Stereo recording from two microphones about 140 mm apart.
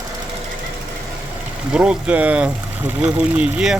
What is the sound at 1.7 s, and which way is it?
Speech, 5° right (ahead or behind).